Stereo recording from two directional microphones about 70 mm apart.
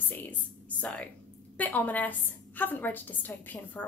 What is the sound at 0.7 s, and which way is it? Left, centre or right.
A woman's voice, centre.